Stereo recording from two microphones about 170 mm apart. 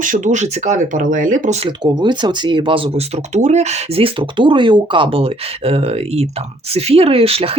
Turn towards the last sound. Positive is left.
turn(degrees=-35)  # may be behind; listen again after turning